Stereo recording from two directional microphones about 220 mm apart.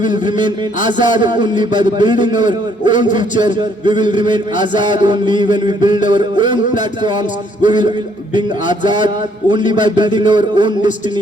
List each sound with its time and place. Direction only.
0.0 s a man's voice: 20° right (ahead or behind)